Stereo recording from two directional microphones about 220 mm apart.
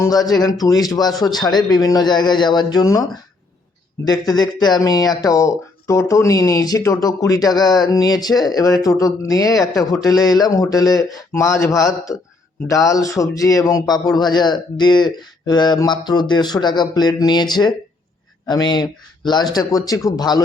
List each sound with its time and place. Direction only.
0.0 s speech: 15° left (ahead or behind)
4.0 s speech: 20° left (ahead or behind)